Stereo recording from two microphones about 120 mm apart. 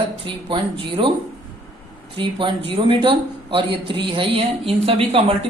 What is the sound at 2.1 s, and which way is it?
A man's voice, 45° right (ahead or behind).